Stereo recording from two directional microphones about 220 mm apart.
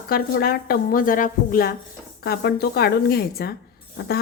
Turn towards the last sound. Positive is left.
turn(degrees=45)  # may be behind; listen again after turning